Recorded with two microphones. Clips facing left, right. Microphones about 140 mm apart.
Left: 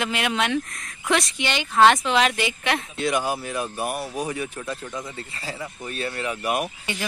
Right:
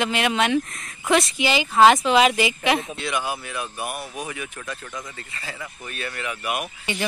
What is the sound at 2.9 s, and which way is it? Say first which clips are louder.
Speech: left 3 dB; 40° left (ahead or behind).